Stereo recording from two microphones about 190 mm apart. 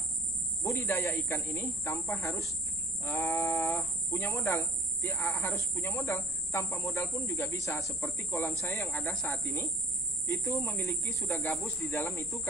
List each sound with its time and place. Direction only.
0.6 s speech: 15° left (ahead or behind)